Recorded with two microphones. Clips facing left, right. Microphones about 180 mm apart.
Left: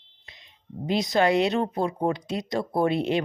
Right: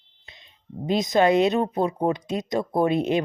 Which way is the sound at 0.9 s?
20° right (ahead or behind).